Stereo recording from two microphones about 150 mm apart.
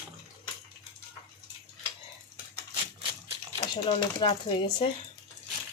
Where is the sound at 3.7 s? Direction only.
30° left (ahead or behind).